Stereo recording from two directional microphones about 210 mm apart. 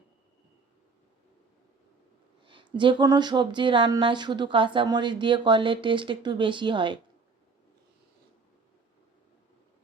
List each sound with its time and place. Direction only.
2.4 s speech: 25° right (ahead or behind)